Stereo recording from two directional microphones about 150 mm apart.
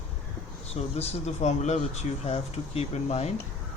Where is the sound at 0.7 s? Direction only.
45° left (ahead or behind).